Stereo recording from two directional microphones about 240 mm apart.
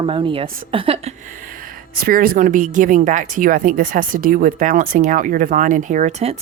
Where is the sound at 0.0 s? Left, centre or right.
Right.